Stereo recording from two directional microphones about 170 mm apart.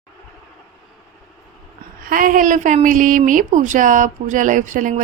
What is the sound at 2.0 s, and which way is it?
A woman's voice, 55° right (ahead or behind).